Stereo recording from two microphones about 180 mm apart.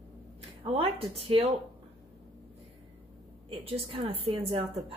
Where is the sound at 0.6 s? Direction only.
30° right (ahead or behind).